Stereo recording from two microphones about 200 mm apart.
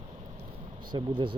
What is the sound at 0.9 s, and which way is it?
Speech, 20° right (ahead or behind).